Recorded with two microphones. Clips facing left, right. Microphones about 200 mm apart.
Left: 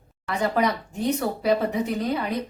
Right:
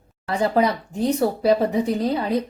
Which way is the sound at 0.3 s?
30° right (ahead or behind).